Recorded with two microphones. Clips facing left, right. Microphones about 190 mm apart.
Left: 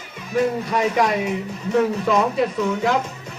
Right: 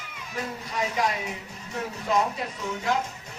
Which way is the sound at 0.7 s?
70° left (ahead or behind).